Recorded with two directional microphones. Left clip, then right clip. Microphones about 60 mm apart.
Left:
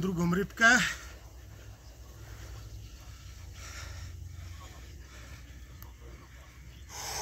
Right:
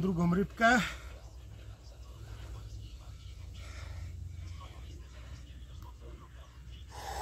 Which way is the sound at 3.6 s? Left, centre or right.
Centre.